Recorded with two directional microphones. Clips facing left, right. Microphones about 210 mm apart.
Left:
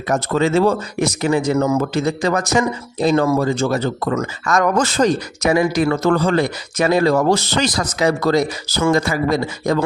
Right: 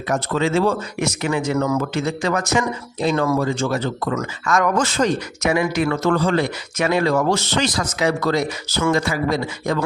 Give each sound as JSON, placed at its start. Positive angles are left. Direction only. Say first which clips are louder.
{"t": 0.1, "sound": "speech", "louder": "left 3 dB", "side_deg": 40}
{"t": 1.8, "sound": "speech", "louder": "left 3 dB", "side_deg": 35}